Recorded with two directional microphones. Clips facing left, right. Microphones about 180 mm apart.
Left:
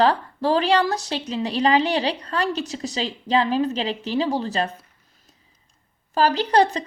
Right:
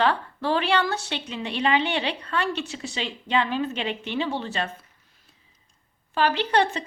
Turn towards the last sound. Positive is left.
turn(degrees=35)  # may be behind; listen again after turning